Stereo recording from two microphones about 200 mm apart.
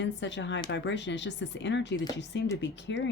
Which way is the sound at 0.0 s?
65° left (ahead or behind).